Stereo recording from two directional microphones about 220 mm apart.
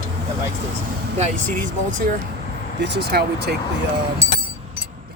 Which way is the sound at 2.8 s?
50° right (ahead or behind).